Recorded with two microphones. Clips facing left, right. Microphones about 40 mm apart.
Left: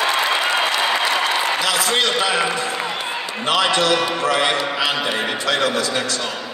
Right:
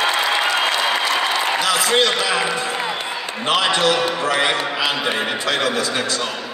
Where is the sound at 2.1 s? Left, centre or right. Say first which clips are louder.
Left 1 dB; left.